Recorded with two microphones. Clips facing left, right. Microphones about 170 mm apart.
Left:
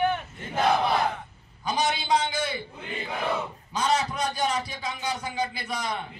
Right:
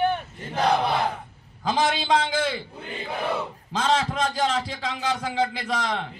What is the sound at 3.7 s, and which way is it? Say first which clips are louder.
A man's voice: right 2 dB; 90° right.